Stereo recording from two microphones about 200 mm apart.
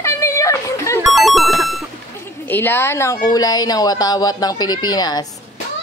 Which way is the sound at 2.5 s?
10° left (ahead or behind).